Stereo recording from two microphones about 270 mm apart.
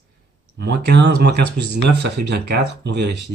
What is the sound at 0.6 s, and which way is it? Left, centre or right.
Speech, right.